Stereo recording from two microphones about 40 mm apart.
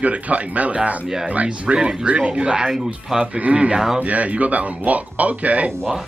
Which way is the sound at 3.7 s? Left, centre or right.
Centre.